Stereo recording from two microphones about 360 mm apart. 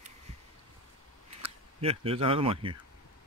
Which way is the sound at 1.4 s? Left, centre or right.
Centre.